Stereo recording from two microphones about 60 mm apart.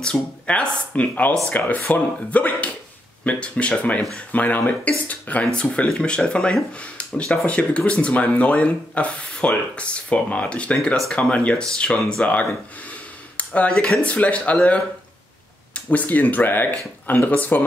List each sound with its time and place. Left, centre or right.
0.0 s speech: centre
5.5 s speech: centre